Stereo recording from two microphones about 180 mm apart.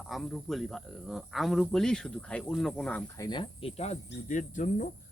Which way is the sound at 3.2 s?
25° left (ahead or behind).